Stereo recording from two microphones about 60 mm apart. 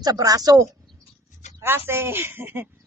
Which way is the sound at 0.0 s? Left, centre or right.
Right.